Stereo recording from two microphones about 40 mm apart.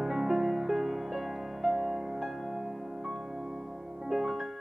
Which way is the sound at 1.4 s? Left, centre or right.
Centre.